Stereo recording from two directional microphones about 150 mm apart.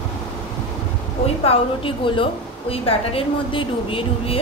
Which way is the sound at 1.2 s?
40° left (ahead or behind).